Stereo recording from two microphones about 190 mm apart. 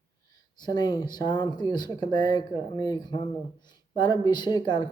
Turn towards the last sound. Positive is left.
turn(degrees=25)  # may be behind; listen again after turning